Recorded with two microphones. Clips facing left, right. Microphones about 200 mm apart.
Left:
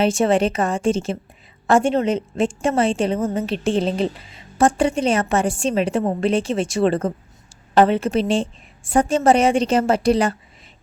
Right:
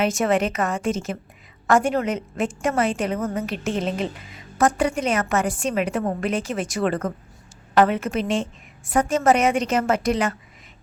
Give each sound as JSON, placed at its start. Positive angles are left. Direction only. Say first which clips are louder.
{"t": 0.0, "sound": "a woman's voice", "louder": "left 4 dB", "side_deg": 30}